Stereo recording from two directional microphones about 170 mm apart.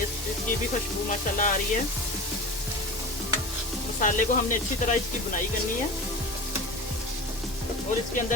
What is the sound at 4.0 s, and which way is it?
Speech, 50° left (ahead or behind).